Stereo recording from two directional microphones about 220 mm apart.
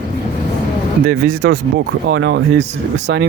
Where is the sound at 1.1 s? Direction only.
50° right (ahead or behind).